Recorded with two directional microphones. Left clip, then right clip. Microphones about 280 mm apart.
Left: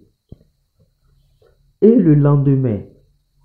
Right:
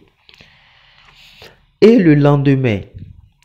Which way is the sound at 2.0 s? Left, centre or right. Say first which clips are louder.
Right 3 dB; right.